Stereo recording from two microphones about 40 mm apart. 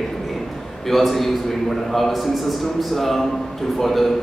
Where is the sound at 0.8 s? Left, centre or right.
Centre.